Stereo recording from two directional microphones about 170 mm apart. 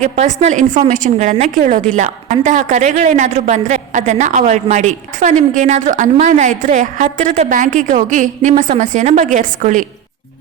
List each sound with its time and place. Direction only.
0.0 s a woman's voice: 45° right (ahead or behind)